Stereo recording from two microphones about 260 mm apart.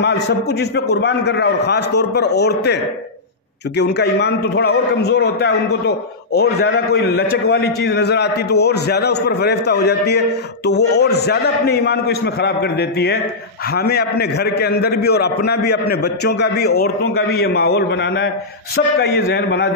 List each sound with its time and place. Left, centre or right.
0.0 s a man's voice: left